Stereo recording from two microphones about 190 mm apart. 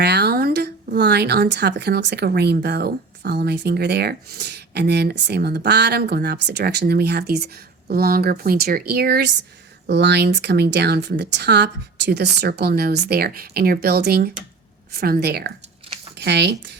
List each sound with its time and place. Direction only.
0.0 s speech: 60° right (ahead or behind)